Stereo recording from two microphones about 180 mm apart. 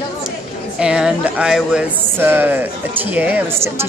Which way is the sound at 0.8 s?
5° right (ahead or behind).